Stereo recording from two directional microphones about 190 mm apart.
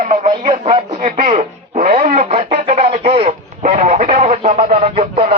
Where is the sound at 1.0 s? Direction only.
40° right (ahead or behind).